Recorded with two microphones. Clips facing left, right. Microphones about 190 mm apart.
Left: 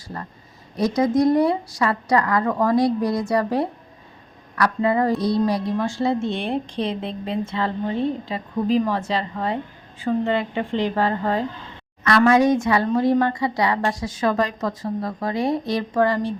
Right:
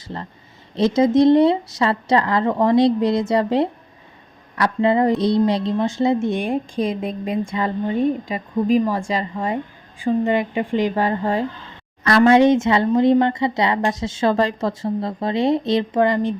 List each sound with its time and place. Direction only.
0.1 s a woman's voice: 25° right (ahead or behind)
12.0 s speech: 30° right (ahead or behind)